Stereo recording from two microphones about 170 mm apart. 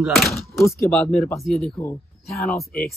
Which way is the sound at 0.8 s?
5° left (ahead or behind).